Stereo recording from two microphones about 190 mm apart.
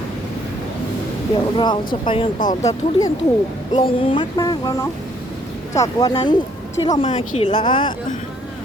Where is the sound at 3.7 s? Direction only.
30° left (ahead or behind).